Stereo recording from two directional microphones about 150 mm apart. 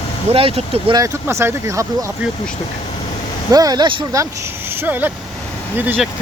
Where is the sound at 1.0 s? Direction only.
20° right (ahead or behind).